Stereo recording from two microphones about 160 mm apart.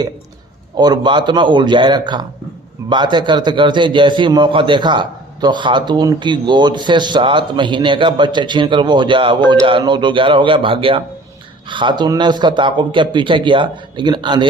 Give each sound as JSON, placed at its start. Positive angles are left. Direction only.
{"t": 0.8, "sound": "a man's voice", "side_deg": -30}